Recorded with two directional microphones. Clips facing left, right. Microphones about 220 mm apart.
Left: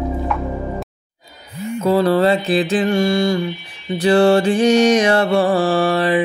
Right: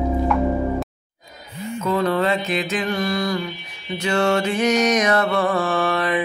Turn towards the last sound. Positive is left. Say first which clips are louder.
# left 5 dB
turn(degrees=30)  # may be behind; listen again after turning